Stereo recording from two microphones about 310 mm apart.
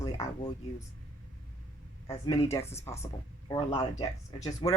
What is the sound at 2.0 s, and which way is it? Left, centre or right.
Speech, centre.